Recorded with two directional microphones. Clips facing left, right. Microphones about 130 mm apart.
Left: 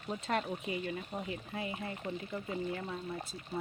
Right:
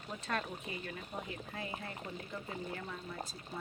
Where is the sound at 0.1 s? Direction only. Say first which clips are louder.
Left 5 dB; 25° left (ahead or behind).